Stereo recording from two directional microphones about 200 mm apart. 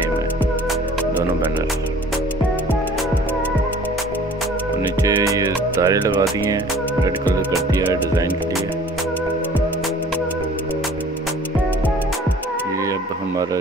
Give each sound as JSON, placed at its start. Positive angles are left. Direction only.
{"t": 5.0, "sound": "music", "side_deg": -15}